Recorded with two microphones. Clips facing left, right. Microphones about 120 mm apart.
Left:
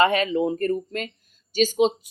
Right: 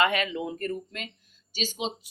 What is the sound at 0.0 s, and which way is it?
A woman's voice, 35° left (ahead or behind).